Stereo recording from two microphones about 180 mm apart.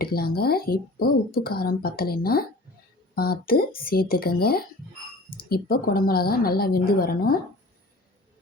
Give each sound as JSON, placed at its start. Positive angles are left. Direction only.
{"t": 0.0, "sound": "speech", "side_deg": 60}